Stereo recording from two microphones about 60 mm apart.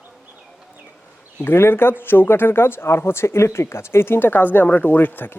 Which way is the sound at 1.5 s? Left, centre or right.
Left.